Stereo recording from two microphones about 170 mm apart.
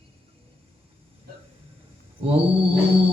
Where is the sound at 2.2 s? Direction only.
35° right (ahead or behind).